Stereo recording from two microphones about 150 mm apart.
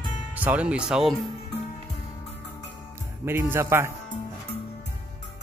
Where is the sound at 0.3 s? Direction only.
10° right (ahead or behind).